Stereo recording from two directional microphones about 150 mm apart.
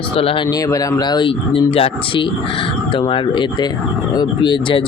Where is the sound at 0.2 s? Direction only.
40° left (ahead or behind).